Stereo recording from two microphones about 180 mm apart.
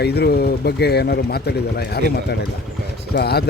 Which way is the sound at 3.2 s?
65° left (ahead or behind).